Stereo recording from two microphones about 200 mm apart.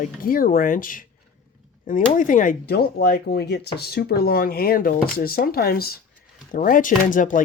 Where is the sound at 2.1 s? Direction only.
40° left (ahead or behind).